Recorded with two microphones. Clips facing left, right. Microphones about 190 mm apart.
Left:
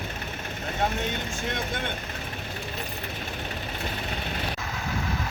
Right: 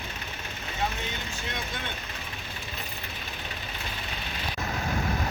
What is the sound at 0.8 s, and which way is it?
Vehicle, 55° left (ahead or behind).